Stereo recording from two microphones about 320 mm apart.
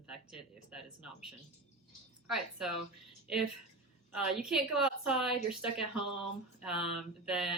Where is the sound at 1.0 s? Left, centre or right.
Right.